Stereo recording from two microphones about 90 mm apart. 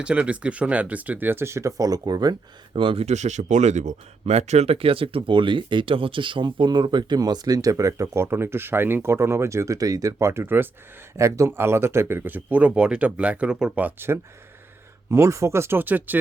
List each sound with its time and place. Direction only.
0.0 s speech: 10° right (ahead or behind); by 2.3 s 45° right (ahead or behind)
2.7 s speech: 80° right
4.7 s speech: 90° right; by 14.1 s 15° right (ahead or behind)
15.1 s speech: 35° right (ahead or behind)